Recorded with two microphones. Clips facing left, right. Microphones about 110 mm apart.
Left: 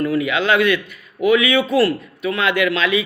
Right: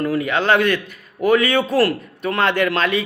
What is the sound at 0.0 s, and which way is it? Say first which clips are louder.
A man's voice: left 1 dB; 40° right (ahead or behind).